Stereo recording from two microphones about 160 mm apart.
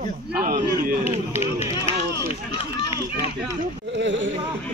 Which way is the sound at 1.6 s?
35° left (ahead or behind).